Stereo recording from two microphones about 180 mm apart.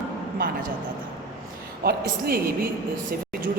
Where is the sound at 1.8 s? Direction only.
60° right (ahead or behind).